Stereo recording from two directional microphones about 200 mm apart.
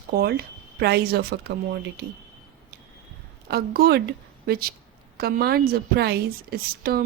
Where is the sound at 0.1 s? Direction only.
50° right (ahead or behind).